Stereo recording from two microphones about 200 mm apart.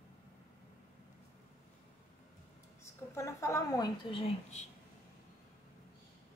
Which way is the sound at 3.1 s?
15° left (ahead or behind).